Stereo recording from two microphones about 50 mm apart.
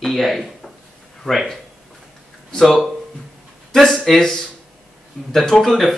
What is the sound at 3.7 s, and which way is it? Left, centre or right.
Speech, centre.